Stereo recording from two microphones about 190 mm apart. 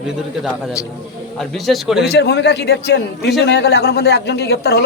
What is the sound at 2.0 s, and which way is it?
A man's voice, 60° left (ahead or behind).